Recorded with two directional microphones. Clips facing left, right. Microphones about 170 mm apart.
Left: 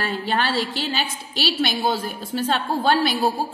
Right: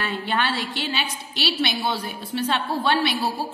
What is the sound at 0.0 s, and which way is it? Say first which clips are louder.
A woman's voice: left 2 dB; 40° left (ahead or behind).